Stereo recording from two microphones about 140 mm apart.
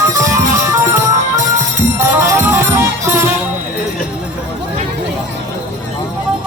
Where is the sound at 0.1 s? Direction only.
20° right (ahead or behind).